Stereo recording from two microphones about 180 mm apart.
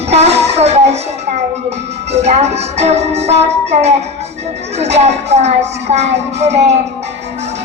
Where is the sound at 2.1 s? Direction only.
35° right (ahead or behind).